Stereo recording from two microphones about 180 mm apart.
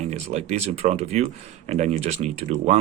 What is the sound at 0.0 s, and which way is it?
Speech, 40° right (ahead or behind).